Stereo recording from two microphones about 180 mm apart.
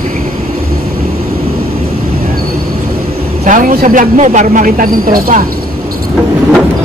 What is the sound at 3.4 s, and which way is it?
A man's voice, 45° right (ahead or behind).